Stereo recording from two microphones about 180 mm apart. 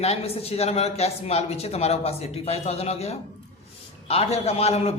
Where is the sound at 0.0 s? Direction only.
35° left (ahead or behind).